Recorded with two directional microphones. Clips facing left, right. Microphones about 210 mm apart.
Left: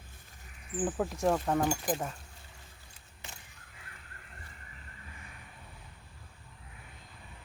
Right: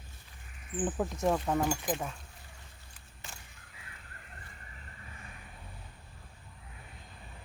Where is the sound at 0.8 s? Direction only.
Centre (ahead or behind).